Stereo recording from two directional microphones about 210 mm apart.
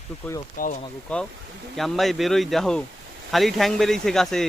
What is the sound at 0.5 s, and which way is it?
Speech, 40° left (ahead or behind).